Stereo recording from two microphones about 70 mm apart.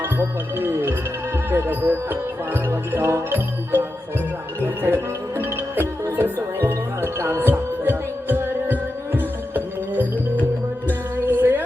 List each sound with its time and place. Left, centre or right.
0.0 s speech: right
6.1 s music: right
11.2 s music: right